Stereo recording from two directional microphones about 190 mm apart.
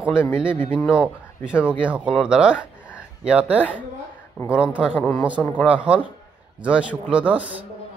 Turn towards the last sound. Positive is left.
turn(degrees=-5)  # may be behind; listen again after turning